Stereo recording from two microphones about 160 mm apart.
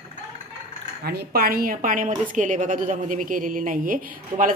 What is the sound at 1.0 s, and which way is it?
A woman's voice, 75° right (ahead or behind).